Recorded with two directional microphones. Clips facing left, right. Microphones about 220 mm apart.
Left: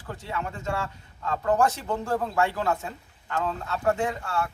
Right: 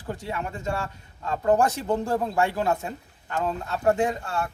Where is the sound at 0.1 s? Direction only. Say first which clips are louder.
Right 2 dB; 15° right (ahead or behind).